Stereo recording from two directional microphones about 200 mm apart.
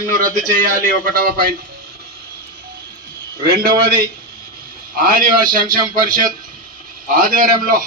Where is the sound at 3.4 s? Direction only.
50° right (ahead or behind).